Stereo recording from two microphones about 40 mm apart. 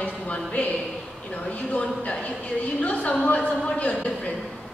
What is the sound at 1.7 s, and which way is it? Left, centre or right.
Speech, left.